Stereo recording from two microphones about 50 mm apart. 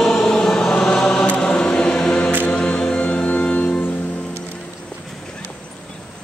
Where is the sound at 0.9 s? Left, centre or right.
Centre.